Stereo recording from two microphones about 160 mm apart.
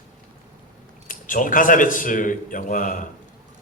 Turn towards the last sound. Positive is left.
turn(degrees=55)  # may be behind; listen again after turning